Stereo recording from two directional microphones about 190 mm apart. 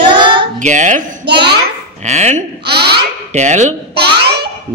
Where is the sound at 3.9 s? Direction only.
60° right (ahead or behind).